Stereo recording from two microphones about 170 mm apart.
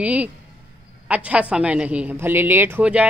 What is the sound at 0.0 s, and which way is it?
Speech, 10° right (ahead or behind).